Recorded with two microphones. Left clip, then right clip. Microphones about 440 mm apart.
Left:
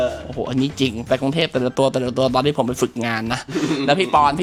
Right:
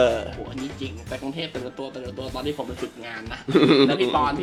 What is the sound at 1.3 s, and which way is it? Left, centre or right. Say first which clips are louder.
Speech: left 12 dB; left.